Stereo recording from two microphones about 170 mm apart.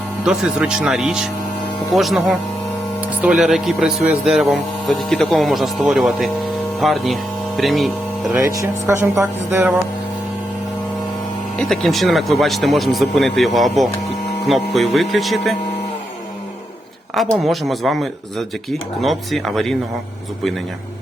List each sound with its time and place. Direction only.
0.3 s speech: 5° right (ahead or behind)
8.4 s speech: 15° right (ahead or behind)
11.5 s speech: centre (ahead or behind)
17.3 s speech: centre (ahead or behind)